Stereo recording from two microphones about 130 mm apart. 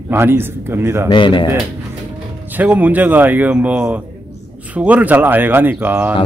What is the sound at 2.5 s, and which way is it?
A man's voice, 10° right (ahead or behind).